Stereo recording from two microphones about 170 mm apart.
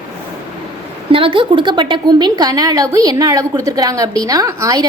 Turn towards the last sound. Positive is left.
turn(degrees=-20)  # may be behind; listen again after turning